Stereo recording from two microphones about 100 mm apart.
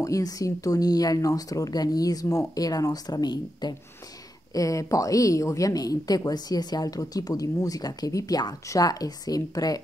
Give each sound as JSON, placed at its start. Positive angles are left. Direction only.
{"t": 0.0, "sound": "speech", "side_deg": 35}
{"t": 4.6, "sound": "speech", "side_deg": 35}